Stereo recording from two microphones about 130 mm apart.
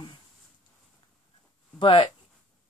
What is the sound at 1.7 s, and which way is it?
Speech, 40° left (ahead or behind).